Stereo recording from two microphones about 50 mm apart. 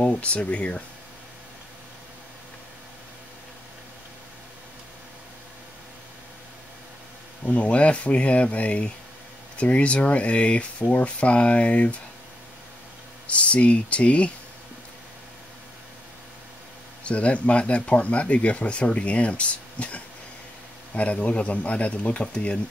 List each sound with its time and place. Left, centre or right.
0.0 s speech: left
7.4 s speech: left
13.3 s speech: left
17.0 s speech: left